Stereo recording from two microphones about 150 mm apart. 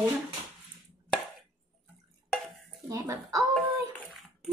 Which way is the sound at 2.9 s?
20° right (ahead or behind).